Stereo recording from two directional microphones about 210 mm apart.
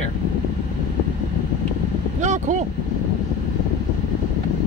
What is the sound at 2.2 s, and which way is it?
Speech, 35° right (ahead or behind).